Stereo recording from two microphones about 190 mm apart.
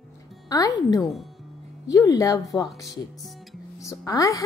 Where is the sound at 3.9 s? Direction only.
20° left (ahead or behind).